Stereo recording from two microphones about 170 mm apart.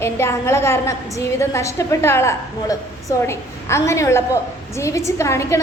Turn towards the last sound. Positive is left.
turn(degrees=15)  # may be behind; listen again after turning